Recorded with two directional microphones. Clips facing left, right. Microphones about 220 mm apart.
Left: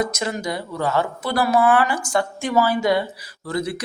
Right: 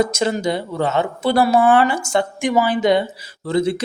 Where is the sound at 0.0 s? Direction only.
30° right (ahead or behind).